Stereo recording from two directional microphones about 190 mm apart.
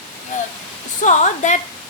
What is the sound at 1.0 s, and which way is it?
Speech, 40° left (ahead or behind).